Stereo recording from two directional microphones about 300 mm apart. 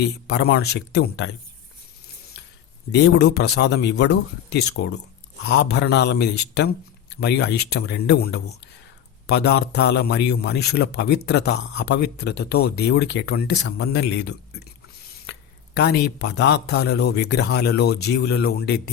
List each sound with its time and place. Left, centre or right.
0.0 s a man's voice: left
2.9 s a man's voice: left